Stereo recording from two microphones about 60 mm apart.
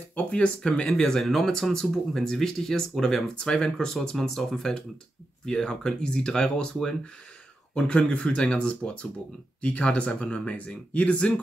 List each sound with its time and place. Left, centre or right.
0.1 s speech: centre